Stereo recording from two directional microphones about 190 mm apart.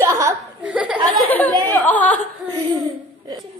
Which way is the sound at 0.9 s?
20° right (ahead or behind).